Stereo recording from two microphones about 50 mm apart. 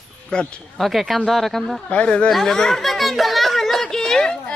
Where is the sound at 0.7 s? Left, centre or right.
Centre.